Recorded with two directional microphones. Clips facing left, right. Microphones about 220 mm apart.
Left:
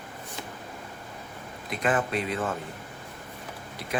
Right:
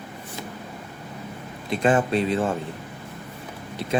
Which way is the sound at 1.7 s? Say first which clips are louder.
Right 6 dB; 30° right (ahead or behind).